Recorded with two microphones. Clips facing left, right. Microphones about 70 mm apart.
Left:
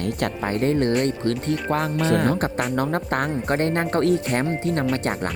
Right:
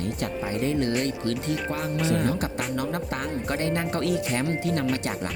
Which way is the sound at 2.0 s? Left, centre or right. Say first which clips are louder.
Left 3 dB; left.